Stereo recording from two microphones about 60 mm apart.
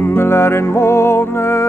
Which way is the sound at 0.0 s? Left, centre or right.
Left.